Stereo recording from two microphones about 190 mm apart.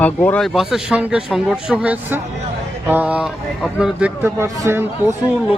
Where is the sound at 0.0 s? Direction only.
10° left (ahead or behind); by 4.9 s 15° right (ahead or behind).